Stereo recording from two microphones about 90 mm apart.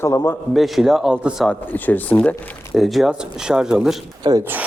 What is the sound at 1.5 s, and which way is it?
Speech, 20° left (ahead or behind).